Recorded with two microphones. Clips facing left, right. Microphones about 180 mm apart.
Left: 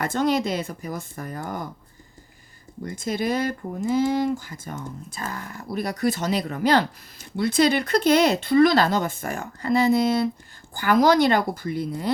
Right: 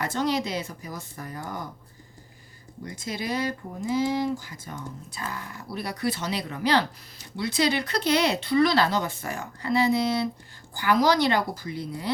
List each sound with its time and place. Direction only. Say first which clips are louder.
0.0 s speech: left 4 dB; 50° left (ahead or behind)
2.8 s speech: left 6 dB; 50° left (ahead or behind)